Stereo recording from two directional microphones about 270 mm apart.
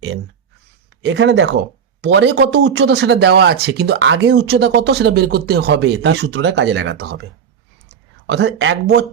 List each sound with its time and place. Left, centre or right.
1.0 s speech: right